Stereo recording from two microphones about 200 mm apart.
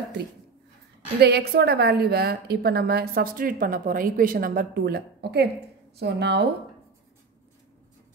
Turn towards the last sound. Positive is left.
turn(degrees=-55)  # may be behind; listen again after turning